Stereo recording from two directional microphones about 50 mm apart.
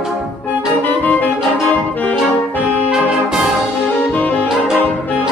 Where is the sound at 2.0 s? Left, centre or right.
Left.